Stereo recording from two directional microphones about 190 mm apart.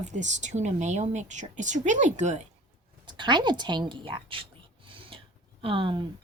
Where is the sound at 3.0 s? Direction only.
25° right (ahead or behind).